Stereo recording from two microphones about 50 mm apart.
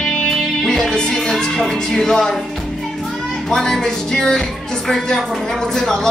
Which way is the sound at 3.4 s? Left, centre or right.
Centre.